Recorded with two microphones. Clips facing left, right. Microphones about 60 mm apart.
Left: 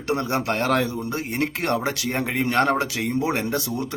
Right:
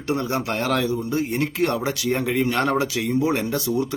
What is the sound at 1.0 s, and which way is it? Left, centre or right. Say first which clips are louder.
A man's voice: right 2 dB; left.